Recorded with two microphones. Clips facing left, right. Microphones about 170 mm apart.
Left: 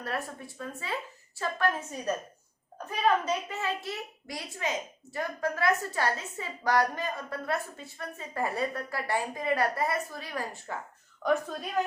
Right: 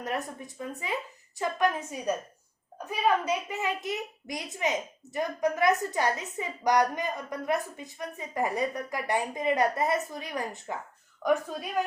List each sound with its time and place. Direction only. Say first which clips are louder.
0.0 s a woman's voice: right 2 dB; 20° right (ahead or behind)